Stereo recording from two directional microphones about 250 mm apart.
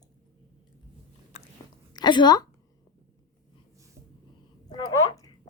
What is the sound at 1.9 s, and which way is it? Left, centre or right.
Speech, centre.